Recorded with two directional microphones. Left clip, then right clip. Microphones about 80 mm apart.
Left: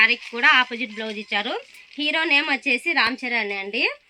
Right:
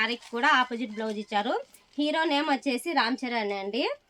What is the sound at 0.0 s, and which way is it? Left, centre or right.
Speech, right.